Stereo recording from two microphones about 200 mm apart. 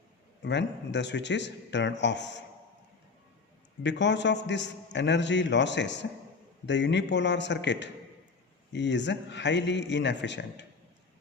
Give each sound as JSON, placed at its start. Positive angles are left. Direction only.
{"t": 0.4, "sound": "a man's voice", "side_deg": 60}
{"t": 3.8, "sound": "a man's voice", "side_deg": 60}